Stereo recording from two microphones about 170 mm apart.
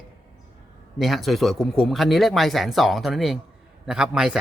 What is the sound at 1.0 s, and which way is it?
A man's voice, centre (ahead or behind).